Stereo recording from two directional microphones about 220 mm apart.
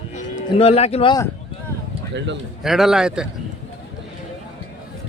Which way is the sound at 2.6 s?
Centre (ahead or behind).